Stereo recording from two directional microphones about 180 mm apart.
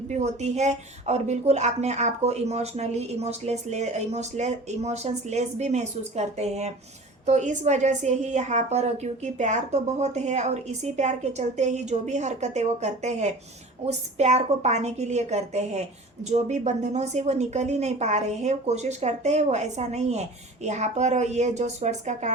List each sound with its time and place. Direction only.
0.1 s speech: 40° right (ahead or behind)